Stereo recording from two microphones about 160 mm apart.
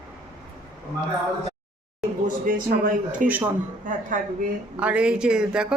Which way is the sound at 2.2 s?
60° right (ahead or behind).